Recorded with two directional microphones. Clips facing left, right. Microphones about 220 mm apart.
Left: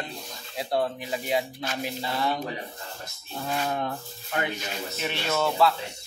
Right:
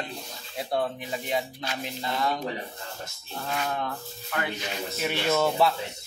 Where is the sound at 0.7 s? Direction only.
5° left (ahead or behind).